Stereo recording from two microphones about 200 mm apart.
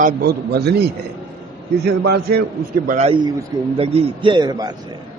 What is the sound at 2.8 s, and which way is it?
Speech, 35° right (ahead or behind).